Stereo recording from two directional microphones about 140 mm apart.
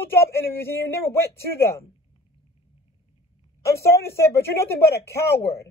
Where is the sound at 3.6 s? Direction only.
20° left (ahead or behind).